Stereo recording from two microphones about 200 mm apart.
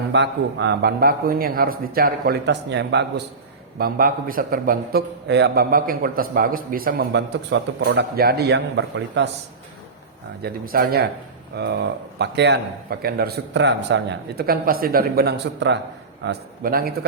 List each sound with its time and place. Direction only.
0.1 s a man's voice: 60° right (ahead or behind)
3.8 s a man's voice: 45° right (ahead or behind); by 8.0 s 75° right (ahead or behind)
8.1 s a man's voice: 50° right (ahead or behind)
10.4 s a man's voice: 50° right (ahead or behind)